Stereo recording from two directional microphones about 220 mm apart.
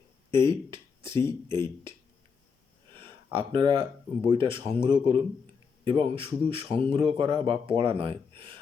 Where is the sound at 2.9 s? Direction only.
20° right (ahead or behind).